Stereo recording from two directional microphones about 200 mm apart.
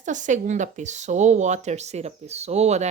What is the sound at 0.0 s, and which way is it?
Speech, 40° right (ahead or behind).